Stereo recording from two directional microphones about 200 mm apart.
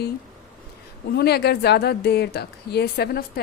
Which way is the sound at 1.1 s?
55° left (ahead or behind).